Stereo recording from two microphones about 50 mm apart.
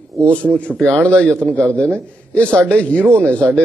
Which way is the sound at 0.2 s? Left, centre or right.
Left.